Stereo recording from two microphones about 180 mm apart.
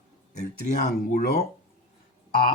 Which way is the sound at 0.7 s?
60° left (ahead or behind).